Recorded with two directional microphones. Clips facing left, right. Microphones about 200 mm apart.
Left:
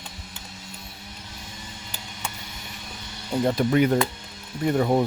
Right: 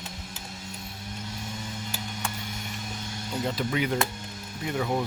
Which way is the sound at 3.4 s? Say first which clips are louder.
Left 8 dB; 50° left (ahead or behind).